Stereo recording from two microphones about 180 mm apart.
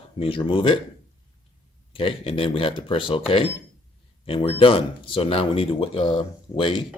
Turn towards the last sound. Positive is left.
turn(degrees=25)  # may be behind; listen again after turning